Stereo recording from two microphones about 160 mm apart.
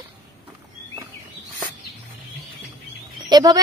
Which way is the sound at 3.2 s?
25° right (ahead or behind).